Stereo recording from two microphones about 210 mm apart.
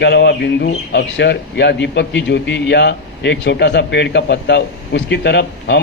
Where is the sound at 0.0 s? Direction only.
55° left (ahead or behind).